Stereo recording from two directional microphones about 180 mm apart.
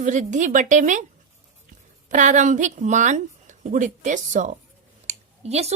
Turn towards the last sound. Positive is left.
turn(degrees=-35)  # may be behind; listen again after turning